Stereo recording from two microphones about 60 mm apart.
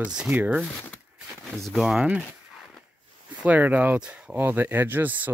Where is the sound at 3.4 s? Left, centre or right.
Right.